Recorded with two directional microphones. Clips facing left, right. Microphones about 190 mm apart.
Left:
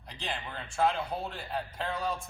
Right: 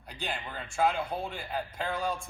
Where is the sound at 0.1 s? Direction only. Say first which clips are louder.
Right 1 dB; 10° right (ahead or behind).